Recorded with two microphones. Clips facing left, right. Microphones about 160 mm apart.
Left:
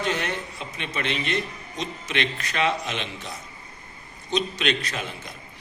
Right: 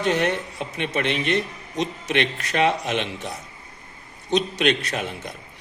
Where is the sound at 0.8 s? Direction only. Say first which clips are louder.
Right 5 dB; 60° right (ahead or behind).